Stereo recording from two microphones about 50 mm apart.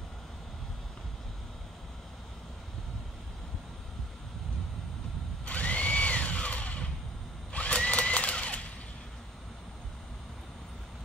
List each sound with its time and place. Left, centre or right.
5.4 s drill: left